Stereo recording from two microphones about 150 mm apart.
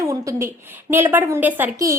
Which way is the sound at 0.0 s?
20° right (ahead or behind).